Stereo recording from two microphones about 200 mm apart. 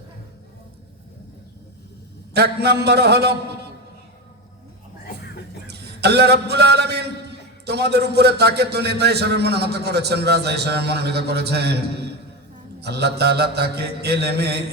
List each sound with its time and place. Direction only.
2.3 s a man's voice: 55° right (ahead or behind)
5.6 s a man's voice: 55° right (ahead or behind)